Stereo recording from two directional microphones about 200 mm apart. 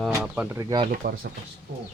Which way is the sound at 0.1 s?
10° right (ahead or behind).